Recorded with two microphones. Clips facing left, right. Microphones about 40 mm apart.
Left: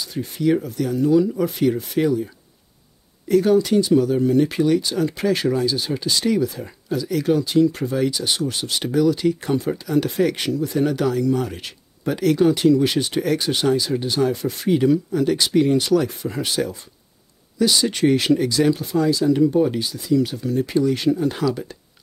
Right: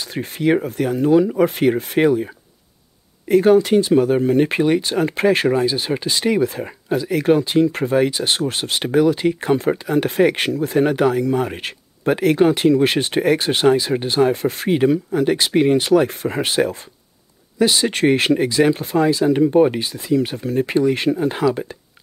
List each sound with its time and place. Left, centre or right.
0.0 s speech: right